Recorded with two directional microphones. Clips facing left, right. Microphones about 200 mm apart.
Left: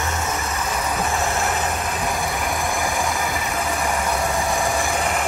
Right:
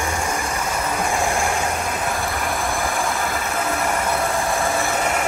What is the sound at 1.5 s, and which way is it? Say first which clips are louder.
Vehicle: right 1 dB; 10° right (ahead or behind).